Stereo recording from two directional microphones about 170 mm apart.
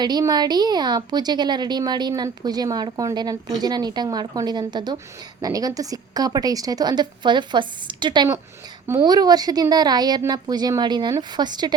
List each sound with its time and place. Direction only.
0.0 s a woman's voice: 25° right (ahead or behind)